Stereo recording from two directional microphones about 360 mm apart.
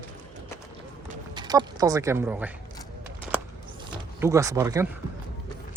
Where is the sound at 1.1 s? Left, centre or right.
Centre.